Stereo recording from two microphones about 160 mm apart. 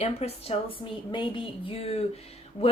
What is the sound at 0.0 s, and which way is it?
A woman's voice, 40° left (ahead or behind).